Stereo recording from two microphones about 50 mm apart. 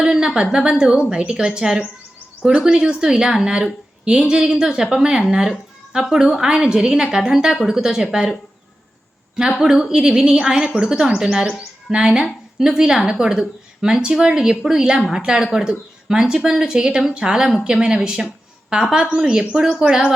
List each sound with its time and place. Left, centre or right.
0.0 s a sound: centre
0.5 s a woman's voice: centre
9.3 s a woman's voice: centre